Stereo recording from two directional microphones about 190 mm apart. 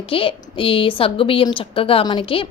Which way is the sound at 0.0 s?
30° left (ahead or behind).